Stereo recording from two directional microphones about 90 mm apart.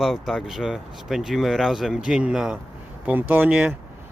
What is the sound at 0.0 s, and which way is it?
Speech, 5° right (ahead or behind).